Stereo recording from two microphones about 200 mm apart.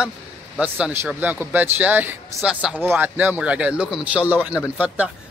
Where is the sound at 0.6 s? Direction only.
5° right (ahead or behind).